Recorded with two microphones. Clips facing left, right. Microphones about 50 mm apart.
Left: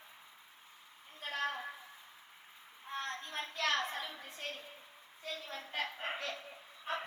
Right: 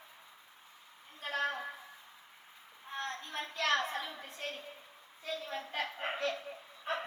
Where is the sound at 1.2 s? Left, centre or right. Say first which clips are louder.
Right 3 dB; centre.